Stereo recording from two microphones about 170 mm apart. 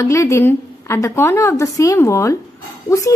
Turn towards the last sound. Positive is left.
turn(degrees=20)  # may be behind; listen again after turning